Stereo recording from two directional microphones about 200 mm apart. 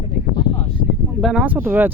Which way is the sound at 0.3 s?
30° left (ahead or behind).